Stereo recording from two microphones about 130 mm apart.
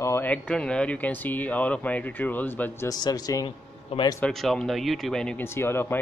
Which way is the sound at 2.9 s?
30° left (ahead or behind).